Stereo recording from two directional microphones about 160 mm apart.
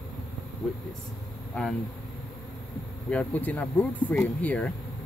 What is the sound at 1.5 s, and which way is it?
Speech, 5° left (ahead or behind).